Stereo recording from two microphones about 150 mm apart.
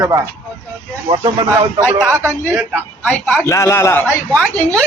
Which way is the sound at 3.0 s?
10° left (ahead or behind).